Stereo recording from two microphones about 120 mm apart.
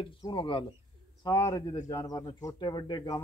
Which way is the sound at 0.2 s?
40° left (ahead or behind).